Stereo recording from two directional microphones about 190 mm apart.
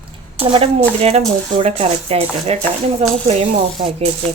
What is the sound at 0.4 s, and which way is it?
Speech, 30° right (ahead or behind).